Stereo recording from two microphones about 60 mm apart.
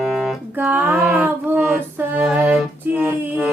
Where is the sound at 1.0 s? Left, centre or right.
Centre.